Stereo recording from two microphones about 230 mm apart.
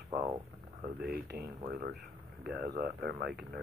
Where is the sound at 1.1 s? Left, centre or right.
Right.